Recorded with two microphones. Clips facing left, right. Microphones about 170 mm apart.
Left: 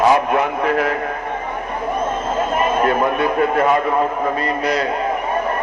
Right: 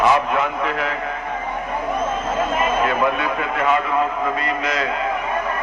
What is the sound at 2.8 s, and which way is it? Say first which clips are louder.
Speech: left 3 dB; 45° left (ahead or behind).